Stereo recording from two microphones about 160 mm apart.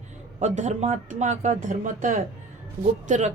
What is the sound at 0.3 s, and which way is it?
Speech, 45° right (ahead or behind).